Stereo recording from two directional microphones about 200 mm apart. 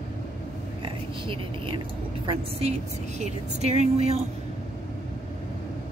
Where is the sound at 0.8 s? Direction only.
25° right (ahead or behind).